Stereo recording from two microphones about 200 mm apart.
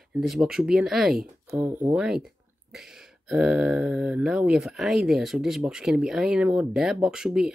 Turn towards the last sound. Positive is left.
turn(degrees=-5)  # may be behind; listen again after turning